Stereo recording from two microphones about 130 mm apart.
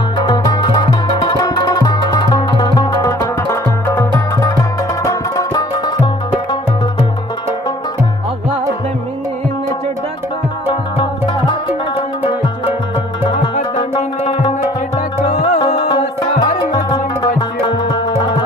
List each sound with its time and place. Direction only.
0.2 s music: 35° left (ahead or behind)
15.3 s music: 60° left (ahead or behind)
16.6 s music: 30° left (ahead or behind)